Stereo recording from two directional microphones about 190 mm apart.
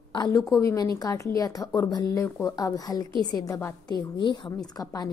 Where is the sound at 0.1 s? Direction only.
20° left (ahead or behind).